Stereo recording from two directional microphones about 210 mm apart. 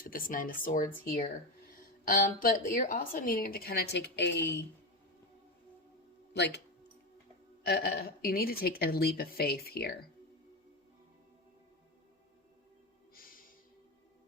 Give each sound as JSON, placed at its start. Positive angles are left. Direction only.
{"t": 0.0, "sound": "a woman's voice", "side_deg": 40}
{"t": 6.3, "sound": "speech", "side_deg": 55}
{"t": 7.6, "sound": "a woman's voice", "side_deg": 50}
{"t": 13.1, "sound": "music", "side_deg": 40}